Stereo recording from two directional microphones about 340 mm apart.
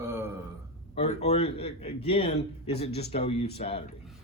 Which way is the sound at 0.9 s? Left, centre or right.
Centre.